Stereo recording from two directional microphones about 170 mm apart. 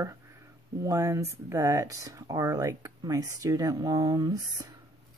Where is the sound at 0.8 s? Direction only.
20° right (ahead or behind).